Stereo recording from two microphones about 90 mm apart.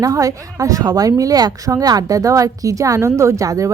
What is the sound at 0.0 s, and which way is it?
Speech, 40° right (ahead or behind).